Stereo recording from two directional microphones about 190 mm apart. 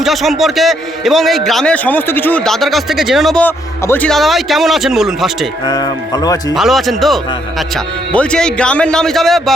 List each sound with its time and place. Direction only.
0.0 s a man's voice: centre (ahead or behind)
5.6 s speech: 20° left (ahead or behind)
6.5 s a man's voice: centre (ahead or behind)